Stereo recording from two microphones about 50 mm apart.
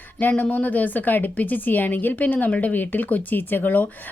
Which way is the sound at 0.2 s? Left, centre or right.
Left.